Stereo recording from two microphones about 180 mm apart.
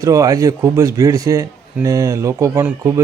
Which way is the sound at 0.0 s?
20° right (ahead or behind).